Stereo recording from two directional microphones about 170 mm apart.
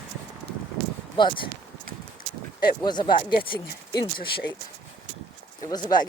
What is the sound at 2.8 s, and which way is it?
Speech, 25° left (ahead or behind).